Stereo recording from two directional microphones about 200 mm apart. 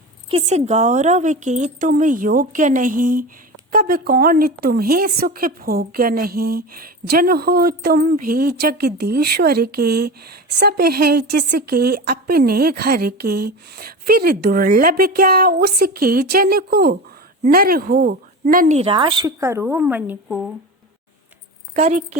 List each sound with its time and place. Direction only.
0.3 s a woman's voice: 30° right (ahead or behind)
18.8 s a woman's voice: 25° right (ahead or behind); by 20.5 s 5° right (ahead or behind)
21.8 s a woman's voice: 35° right (ahead or behind)